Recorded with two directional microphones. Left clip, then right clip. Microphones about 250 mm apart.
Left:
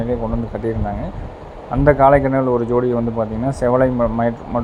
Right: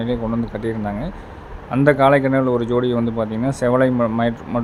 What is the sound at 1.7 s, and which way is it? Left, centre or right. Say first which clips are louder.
Speech: left 2 dB; centre.